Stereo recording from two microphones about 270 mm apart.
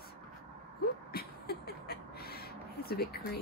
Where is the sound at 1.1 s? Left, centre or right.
Left.